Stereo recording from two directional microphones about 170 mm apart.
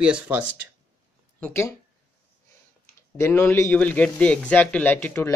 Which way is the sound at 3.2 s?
15° left (ahead or behind).